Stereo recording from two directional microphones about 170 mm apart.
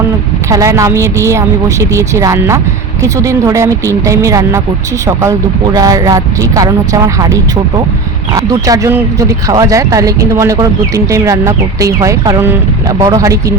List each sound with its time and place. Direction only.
0.5 s a woman's voice: 20° right (ahead or behind)
5.7 s speech: 20° right (ahead or behind)